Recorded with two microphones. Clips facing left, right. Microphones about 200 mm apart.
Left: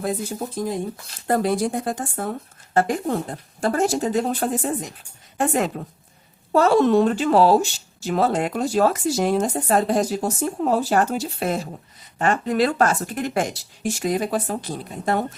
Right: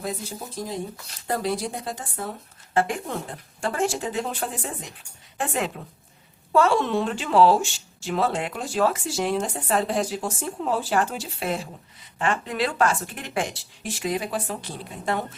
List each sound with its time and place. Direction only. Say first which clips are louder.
0.0 s a woman's voice: left 6 dB; 55° left (ahead or behind)
2.7 s a woman's voice: left 4 dB; 40° left (ahead or behind)